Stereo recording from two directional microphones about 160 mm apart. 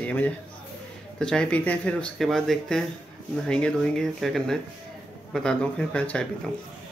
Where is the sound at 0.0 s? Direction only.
10° left (ahead or behind).